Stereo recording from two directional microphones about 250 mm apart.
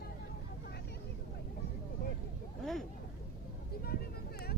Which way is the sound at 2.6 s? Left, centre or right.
Centre.